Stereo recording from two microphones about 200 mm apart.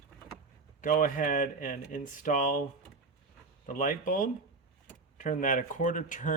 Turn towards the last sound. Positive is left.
turn(degrees=40)  # may be behind; listen again after turning